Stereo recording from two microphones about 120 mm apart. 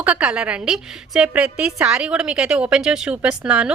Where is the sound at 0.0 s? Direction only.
10° right (ahead or behind).